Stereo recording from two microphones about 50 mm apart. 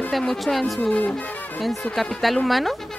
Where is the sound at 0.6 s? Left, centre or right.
Left.